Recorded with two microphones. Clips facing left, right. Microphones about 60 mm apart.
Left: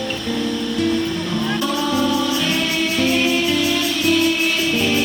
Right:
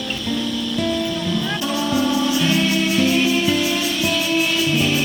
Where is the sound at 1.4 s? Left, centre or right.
Left.